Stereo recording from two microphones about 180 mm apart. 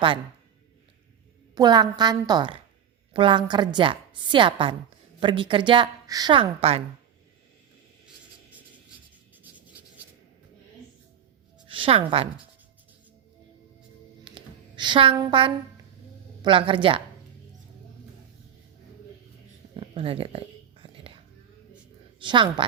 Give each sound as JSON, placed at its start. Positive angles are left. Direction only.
{"t": 1.5, "sound": "a woman's voice", "side_deg": -25}
{"t": 9.3, "sound": "a sound", "side_deg": -10}
{"t": 11.7, "sound": "a woman's voice", "side_deg": -30}
{"t": 14.3, "sound": "a sound", "side_deg": -25}
{"t": 16.4, "sound": "a woman's voice", "side_deg": -30}
{"t": 19.7, "sound": "whispering", "side_deg": -30}
{"t": 22.2, "sound": "a woman's voice", "side_deg": -25}